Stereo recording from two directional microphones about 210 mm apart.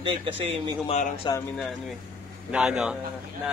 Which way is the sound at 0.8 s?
30° left (ahead or behind).